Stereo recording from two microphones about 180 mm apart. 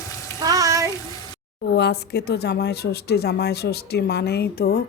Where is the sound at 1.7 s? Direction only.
70° left (ahead or behind).